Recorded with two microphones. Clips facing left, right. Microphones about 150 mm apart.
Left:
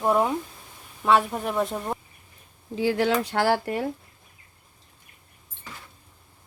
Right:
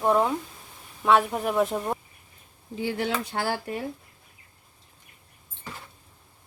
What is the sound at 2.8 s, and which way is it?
Speech, 90° left.